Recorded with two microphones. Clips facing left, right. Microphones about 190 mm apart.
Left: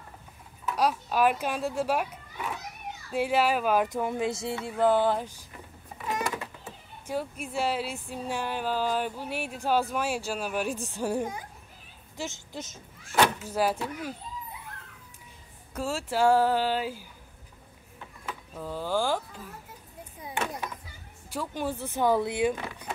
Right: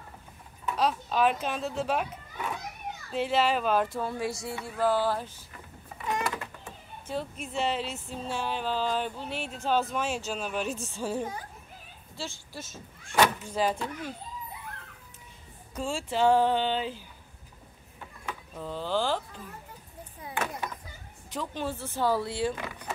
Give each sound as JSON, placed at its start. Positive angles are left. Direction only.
{"t": 0.7, "sound": "a child's voice", "side_deg": 10}
{"t": 6.0, "sound": "a sound", "side_deg": 5}
{"t": 6.4, "sound": "speech", "side_deg": 10}
{"t": 13.0, "sound": "speech", "side_deg": 5}
{"t": 15.7, "sound": "speech", "side_deg": 5}
{"t": 18.6, "sound": "speech", "side_deg": 10}
{"t": 21.3, "sound": "speech", "side_deg": 10}